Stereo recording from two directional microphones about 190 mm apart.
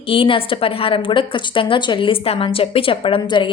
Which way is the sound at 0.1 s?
30° left (ahead or behind).